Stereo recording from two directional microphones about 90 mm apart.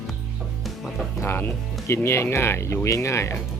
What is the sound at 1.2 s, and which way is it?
Speech, 25° left (ahead or behind).